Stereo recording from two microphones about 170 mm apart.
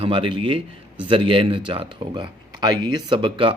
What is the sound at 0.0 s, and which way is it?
Speech, 30° right (ahead or behind).